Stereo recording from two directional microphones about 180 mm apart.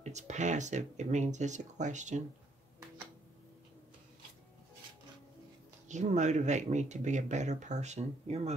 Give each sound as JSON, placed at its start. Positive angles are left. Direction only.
{"t": 0.0, "sound": "speech", "side_deg": -40}
{"t": 5.9, "sound": "speech", "side_deg": -40}